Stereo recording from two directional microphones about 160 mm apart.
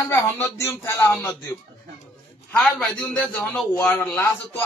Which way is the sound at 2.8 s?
5° left (ahead or behind).